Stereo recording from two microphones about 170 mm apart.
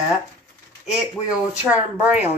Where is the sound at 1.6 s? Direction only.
10° right (ahead or behind).